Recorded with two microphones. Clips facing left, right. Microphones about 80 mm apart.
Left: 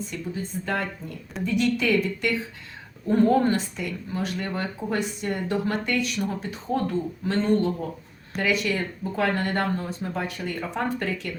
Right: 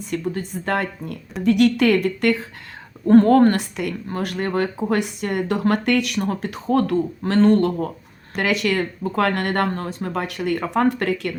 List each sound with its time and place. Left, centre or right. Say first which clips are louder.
0.1 s speech: right 6 dB; right